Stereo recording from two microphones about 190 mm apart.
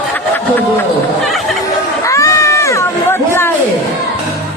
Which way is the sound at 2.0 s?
15° left (ahead or behind).